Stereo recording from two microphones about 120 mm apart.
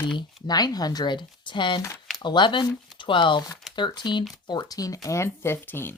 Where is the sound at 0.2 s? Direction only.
35° left (ahead or behind).